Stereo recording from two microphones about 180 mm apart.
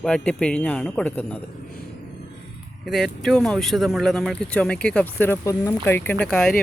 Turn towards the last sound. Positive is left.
turn(degrees=5)  # may be behind; listen again after turning